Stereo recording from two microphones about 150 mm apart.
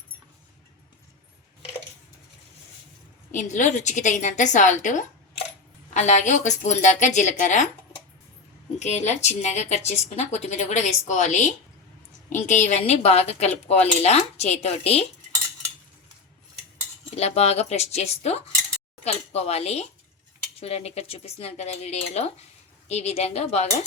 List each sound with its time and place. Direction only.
3.3 s a woman's voice: 55° left (ahead or behind)
8.8 s speech: 50° left (ahead or behind)
17.2 s speech: 45° left (ahead or behind)